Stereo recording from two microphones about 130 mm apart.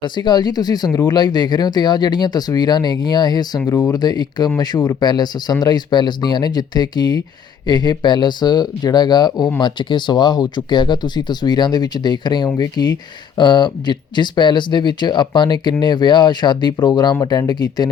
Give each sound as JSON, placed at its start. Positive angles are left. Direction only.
{"t": 0.0, "sound": "speech", "side_deg": 35}